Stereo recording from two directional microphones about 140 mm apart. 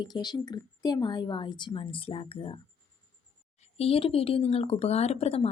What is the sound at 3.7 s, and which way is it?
Speech, 45° left (ahead or behind).